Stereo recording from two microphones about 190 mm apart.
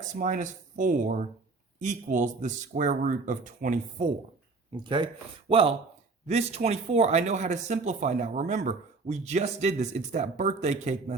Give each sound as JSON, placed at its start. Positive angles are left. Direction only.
{"t": 0.2, "sound": "speech", "side_deg": -45}
{"t": 4.7, "sound": "speech", "side_deg": -25}